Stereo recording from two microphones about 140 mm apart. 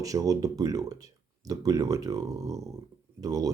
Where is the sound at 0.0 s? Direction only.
25° right (ahead or behind).